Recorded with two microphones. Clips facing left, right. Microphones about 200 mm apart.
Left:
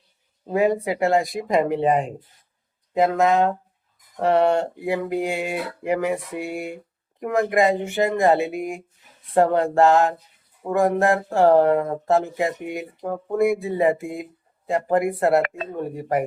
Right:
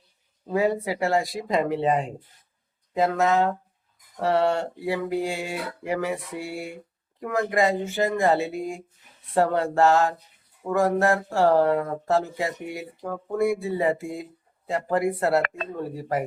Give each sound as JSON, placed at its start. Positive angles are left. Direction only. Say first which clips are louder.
{"t": 0.5, "sound": "speech", "louder": "left 3 dB", "side_deg": 20}